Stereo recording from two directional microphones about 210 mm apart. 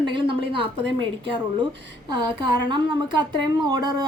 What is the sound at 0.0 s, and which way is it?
A woman's voice, 25° right (ahead or behind).